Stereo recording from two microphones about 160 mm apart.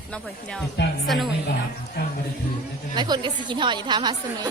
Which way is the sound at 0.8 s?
90° left.